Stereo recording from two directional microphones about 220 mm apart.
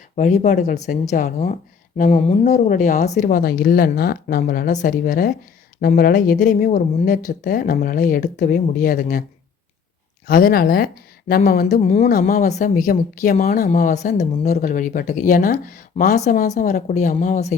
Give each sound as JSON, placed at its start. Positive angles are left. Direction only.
{"t": 0.2, "sound": "speech", "side_deg": 30}
{"t": 2.0, "sound": "speech", "side_deg": 25}
{"t": 10.2, "sound": "speech", "side_deg": 40}